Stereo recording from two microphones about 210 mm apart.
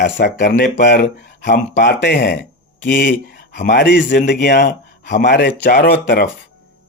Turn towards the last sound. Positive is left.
turn(degrees=45)  # may be behind; listen again after turning